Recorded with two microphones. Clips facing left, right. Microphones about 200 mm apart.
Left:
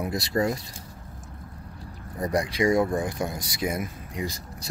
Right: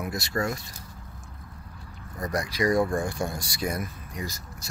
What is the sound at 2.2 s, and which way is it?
Speech, 30° left (ahead or behind).